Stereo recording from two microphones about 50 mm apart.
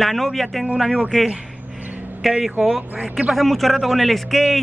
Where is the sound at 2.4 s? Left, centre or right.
Centre.